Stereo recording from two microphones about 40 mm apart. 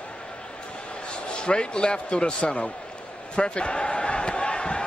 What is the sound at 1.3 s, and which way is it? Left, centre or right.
Speech, left.